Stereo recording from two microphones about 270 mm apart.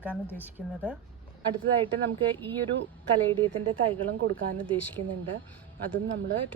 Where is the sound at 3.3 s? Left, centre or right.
Centre.